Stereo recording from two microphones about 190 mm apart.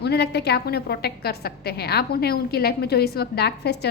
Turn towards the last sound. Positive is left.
turn(degrees=60)  # may be behind; listen again after turning